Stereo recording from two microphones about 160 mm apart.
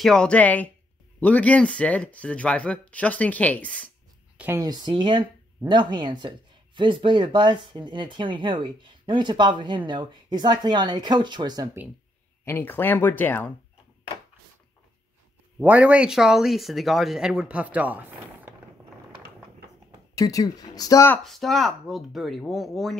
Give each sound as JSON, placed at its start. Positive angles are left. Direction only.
{"t": 0.0, "sound": "speech", "side_deg": 5}
{"t": 4.4, "sound": "speech", "side_deg": -15}
{"t": 4.6, "sound": "speech", "side_deg": -25}
{"t": 12.4, "sound": "speech", "side_deg": 15}
{"t": 15.6, "sound": "speech", "side_deg": -10}
{"t": 20.2, "sound": "speech", "side_deg": 20}
{"t": 21.2, "sound": "speech", "side_deg": 0}